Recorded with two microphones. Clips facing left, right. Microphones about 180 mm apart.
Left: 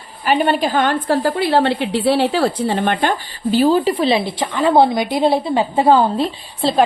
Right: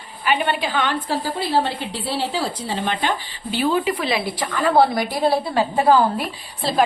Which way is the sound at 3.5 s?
35° left (ahead or behind).